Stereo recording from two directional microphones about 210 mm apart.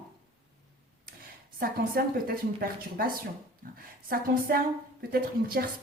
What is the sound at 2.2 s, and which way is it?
A woman's voice, 45° right (ahead or behind).